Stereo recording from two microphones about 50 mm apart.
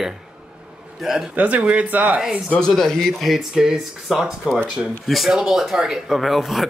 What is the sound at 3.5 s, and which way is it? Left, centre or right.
Speech, centre.